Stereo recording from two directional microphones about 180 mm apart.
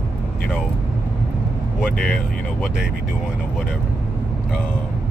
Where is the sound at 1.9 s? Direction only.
50° left (ahead or behind).